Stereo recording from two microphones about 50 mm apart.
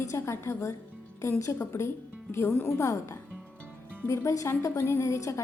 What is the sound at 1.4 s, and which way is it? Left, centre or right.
Speech, left.